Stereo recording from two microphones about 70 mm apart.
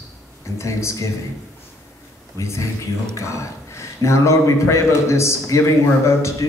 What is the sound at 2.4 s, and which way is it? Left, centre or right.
A man's voice, left.